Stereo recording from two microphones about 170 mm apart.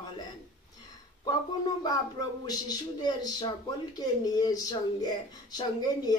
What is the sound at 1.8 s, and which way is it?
Speech, 25° left (ahead or behind).